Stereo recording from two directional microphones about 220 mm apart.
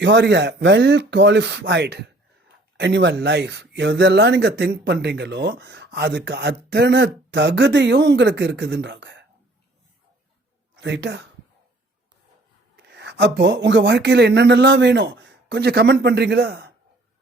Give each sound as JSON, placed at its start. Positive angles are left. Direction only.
{"t": 0.0, "sound": "speech", "side_deg": -55}
{"t": 10.8, "sound": "speech", "side_deg": -55}
{"t": 12.7, "sound": "speech", "side_deg": -50}